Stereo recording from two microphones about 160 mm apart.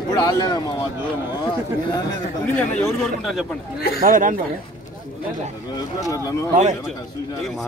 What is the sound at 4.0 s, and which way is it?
Speech, 55° right (ahead or behind).